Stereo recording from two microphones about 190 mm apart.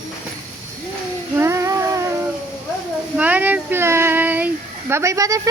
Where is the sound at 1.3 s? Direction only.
15° right (ahead or behind).